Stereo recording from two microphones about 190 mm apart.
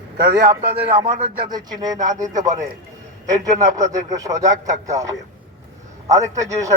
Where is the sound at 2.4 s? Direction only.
40° right (ahead or behind).